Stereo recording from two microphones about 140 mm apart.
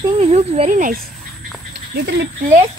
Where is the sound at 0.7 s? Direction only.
70° right (ahead or behind).